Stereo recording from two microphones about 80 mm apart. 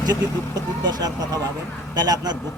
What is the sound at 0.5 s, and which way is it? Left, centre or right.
A man's voice, right.